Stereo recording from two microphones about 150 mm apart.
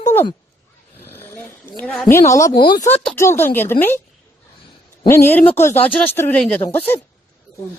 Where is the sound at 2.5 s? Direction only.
90° left.